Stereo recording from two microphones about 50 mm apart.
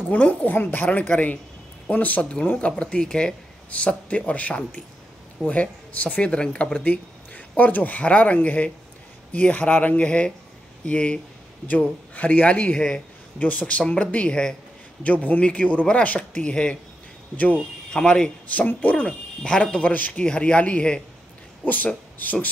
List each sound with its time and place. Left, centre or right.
0.1 s speech: left
0.6 s speech: left
2.8 s speech: centre
3.7 s speech: left
6.8 s speech: left
17.9 s speech: centre
19.0 s speech: centre
19.9 s speech: left
20.2 s speech: left
21.6 s speech: left